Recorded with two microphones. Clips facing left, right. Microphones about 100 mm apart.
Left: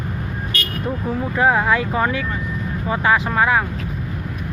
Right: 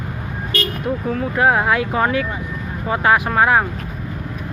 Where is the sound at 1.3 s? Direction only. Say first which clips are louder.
Even; 15° right (ahead or behind).